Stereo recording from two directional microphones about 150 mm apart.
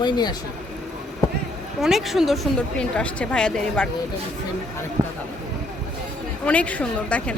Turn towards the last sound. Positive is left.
turn(degrees=10)  # may be behind; listen again after turning